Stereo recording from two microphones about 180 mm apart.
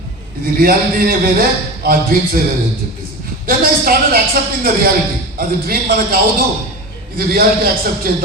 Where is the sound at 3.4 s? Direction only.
55° right (ahead or behind).